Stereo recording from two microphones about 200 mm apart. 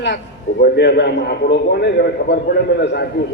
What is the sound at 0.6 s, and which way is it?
A woman's voice, 55° left (ahead or behind).